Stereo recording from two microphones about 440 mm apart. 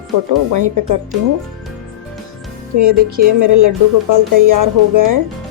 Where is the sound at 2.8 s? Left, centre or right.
Right.